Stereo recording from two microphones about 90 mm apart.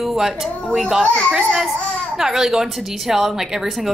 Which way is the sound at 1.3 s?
5° right (ahead or behind).